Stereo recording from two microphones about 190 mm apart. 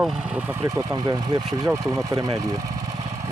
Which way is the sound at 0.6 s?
20° right (ahead or behind).